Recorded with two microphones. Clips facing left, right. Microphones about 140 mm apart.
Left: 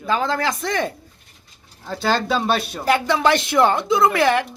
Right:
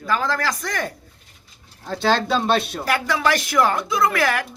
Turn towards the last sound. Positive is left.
turn(degrees=25)  # may be behind; listen again after turning